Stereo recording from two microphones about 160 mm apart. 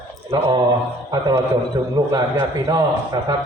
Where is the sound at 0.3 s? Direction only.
35° right (ahead or behind).